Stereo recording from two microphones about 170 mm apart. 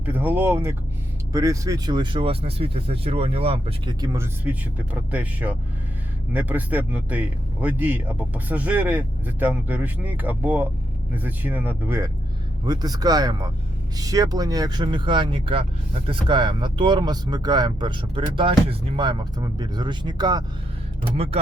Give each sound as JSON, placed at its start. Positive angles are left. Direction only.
{"t": 0.0, "sound": "speech", "side_deg": -10}